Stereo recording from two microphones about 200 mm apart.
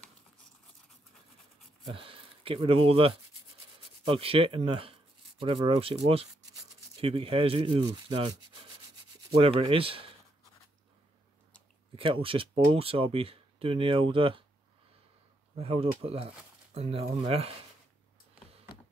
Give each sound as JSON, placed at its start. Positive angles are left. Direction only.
{"t": 1.9, "sound": "speech", "side_deg": -25}
{"t": 11.9, "sound": "speech", "side_deg": -25}
{"t": 15.5, "sound": "speech", "side_deg": -30}